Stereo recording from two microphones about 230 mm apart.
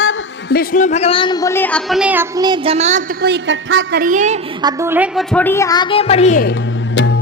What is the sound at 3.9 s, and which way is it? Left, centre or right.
Speech, right.